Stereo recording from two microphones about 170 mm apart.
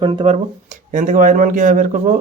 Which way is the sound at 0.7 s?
50° right (ahead or behind).